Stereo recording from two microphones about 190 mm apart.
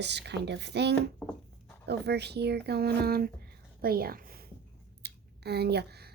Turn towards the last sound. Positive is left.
turn(degrees=-60)  # may be behind; listen again after turning